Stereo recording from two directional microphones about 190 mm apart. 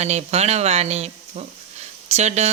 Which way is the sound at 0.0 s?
35° right (ahead or behind).